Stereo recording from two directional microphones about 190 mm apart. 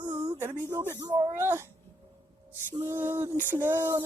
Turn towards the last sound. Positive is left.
turn(degrees=-15)  # may be behind; listen again after turning